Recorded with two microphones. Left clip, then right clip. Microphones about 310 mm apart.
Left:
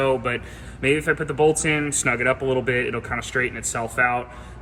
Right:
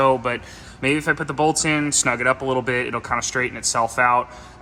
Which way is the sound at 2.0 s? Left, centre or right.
Right.